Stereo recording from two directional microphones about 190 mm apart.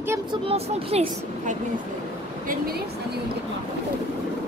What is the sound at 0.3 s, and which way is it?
A woman's voice, 30° right (ahead or behind).